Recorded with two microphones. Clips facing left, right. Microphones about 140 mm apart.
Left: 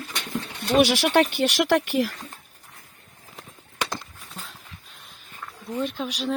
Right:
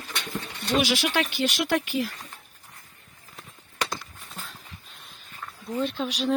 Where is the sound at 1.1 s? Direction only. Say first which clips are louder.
Left 6 dB; 55° left (ahead or behind).